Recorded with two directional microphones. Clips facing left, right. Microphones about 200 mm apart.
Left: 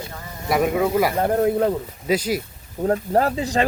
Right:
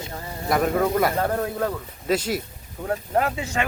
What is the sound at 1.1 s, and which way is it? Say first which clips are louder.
Speech: left 5 dB; 25° left (ahead or behind).